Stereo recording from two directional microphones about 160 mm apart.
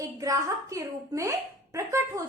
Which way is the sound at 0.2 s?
20° right (ahead or behind).